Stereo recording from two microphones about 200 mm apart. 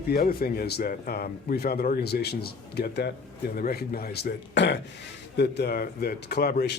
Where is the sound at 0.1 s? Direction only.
50° left (ahead or behind).